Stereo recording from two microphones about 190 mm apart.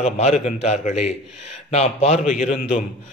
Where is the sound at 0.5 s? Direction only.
40° left (ahead or behind).